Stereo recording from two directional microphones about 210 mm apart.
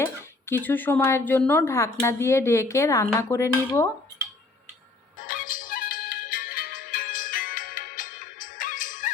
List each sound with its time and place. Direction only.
0.0 s speech: 10° left (ahead or behind)
5.2 s music: 40° left (ahead or behind)